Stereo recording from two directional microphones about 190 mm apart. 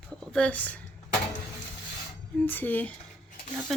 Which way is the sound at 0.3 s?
5° left (ahead or behind).